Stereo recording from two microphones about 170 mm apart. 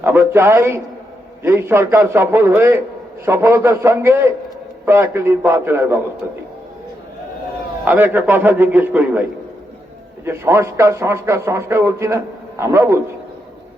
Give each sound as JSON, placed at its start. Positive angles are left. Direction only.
{"t": 0.0, "sound": "a man's voice", "side_deg": -15}
{"t": 7.9, "sound": "a man's voice", "side_deg": -10}
{"t": 10.2, "sound": "a man's voice", "side_deg": -15}